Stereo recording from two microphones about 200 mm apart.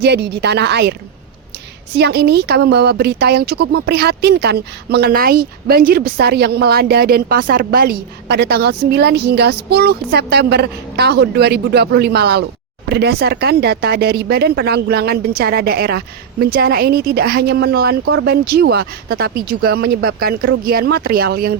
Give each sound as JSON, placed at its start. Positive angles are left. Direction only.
{"t": 0.0, "sound": "a woman's voice", "side_deg": -55}
{"t": 2.0, "sound": "speech", "side_deg": -55}
{"t": 18.0, "sound": "speech", "side_deg": -90}
{"t": 18.3, "sound": "speech", "side_deg": -50}